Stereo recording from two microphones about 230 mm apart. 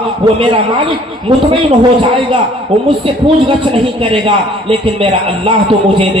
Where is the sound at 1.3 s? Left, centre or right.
Right.